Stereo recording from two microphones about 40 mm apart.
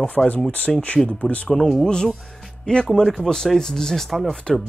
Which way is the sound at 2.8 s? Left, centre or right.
Centre.